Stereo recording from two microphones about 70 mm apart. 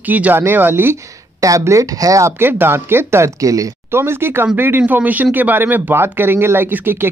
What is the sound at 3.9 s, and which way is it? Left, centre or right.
Speech, right.